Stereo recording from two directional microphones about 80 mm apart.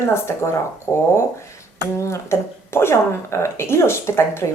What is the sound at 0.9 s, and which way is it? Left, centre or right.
Speech, centre.